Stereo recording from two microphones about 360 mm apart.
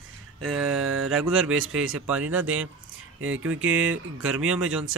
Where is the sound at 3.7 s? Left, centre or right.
Centre.